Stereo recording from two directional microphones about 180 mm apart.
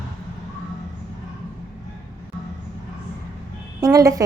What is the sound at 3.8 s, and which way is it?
Music, 20° right (ahead or behind).